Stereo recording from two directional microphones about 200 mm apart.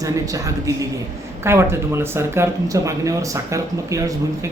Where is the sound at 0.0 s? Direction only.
15° right (ahead or behind).